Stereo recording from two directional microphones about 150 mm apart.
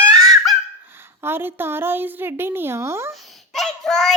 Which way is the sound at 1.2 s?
15° right (ahead or behind).